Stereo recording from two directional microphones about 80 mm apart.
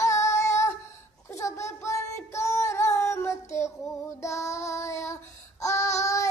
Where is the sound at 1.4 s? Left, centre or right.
Left.